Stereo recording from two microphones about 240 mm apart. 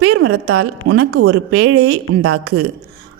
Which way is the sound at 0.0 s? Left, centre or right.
Right.